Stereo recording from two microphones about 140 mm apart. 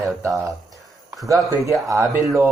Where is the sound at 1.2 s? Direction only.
20° right (ahead or behind).